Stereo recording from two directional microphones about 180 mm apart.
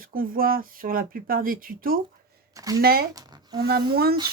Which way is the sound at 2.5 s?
20° right (ahead or behind).